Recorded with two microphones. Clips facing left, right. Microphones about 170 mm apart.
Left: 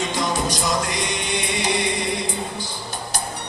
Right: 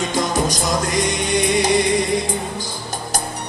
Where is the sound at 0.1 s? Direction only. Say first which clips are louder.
Right 3 dB; 45° right (ahead or behind).